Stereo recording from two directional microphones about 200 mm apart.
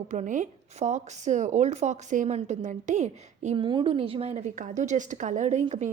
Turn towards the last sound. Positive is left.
turn(degrees=-35)  # may be behind; listen again after turning